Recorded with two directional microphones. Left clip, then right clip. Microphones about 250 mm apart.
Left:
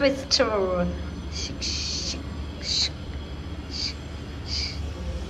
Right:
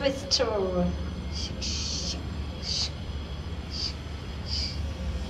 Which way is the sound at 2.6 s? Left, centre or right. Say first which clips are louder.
Left 5 dB; centre.